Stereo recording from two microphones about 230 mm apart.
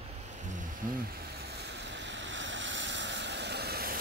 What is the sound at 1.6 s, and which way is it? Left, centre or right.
Waves, right.